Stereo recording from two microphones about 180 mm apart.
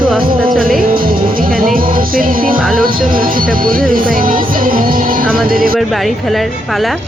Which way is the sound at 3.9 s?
50° right (ahead or behind).